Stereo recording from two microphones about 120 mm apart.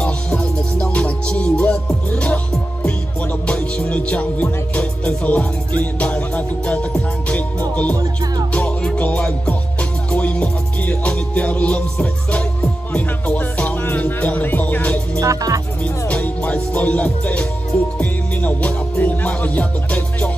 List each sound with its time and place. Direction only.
0.0 s music: 10° left (ahead or behind)
15.1 s music: 25° right (ahead or behind)
15.8 s music: 10° left (ahead or behind)